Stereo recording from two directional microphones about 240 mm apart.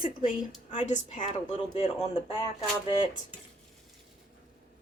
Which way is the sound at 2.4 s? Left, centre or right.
Centre.